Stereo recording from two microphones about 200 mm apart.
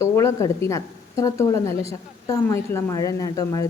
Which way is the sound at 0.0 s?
15° left (ahead or behind).